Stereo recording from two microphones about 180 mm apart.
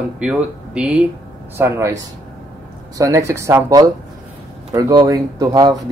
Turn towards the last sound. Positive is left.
turn(degrees=-20)  # may be behind; listen again after turning